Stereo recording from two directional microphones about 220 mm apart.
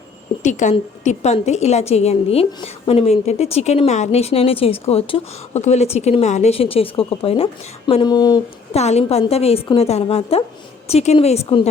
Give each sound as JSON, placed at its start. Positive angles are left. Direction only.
{"t": 0.4, "sound": "a woman's voice", "side_deg": 35}
{"t": 8.7, "sound": "a woman's voice", "side_deg": 30}